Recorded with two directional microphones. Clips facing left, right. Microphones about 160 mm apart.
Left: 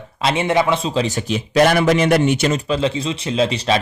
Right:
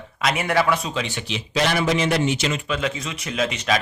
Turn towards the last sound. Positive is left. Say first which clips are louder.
# left 5 dB
turn(degrees=30)  # may be behind; listen again after turning